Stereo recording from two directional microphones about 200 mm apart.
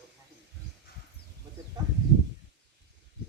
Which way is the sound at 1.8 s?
20° right (ahead or behind).